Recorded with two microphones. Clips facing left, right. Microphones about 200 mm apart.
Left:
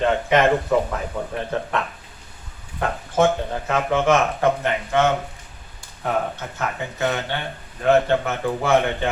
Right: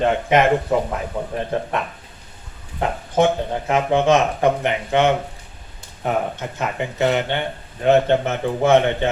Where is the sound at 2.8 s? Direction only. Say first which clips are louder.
Right 1 dB; 20° right (ahead or behind).